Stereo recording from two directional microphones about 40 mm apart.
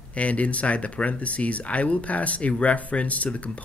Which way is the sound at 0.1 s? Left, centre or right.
Left.